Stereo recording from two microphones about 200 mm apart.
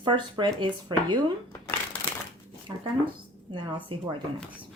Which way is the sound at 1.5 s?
10° left (ahead or behind).